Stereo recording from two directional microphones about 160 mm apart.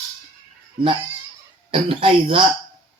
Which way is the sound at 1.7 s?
35° right (ahead or behind).